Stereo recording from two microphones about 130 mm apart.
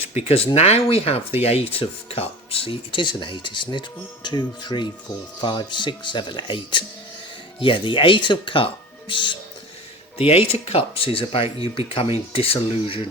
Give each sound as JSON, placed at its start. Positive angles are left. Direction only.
{"t": 0.3, "sound": "speech", "side_deg": 50}
{"t": 10.2, "sound": "speech", "side_deg": 50}